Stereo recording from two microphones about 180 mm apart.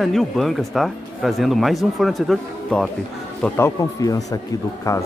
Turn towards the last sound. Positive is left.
turn(degrees=20)  # may be behind; listen again after turning